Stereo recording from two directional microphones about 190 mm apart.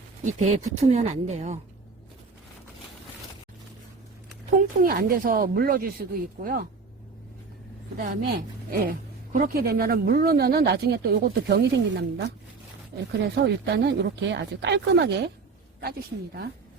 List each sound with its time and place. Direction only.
0.3 s speech: 35° right (ahead or behind)
4.8 s a woman's voice: 50° right (ahead or behind)
7.9 s a woman's voice: 55° right (ahead or behind)